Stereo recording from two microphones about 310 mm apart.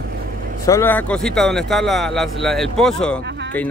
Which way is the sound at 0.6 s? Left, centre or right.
Centre.